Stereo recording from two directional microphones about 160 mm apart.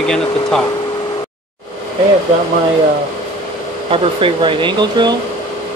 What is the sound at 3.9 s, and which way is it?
Speech, 35° right (ahead or behind).